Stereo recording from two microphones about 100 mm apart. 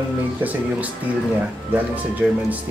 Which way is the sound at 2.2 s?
10° right (ahead or behind).